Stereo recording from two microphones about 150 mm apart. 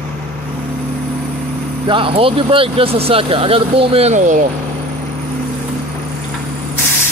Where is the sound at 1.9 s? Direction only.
35° right (ahead or behind); by 4.4 s 55° right (ahead or behind).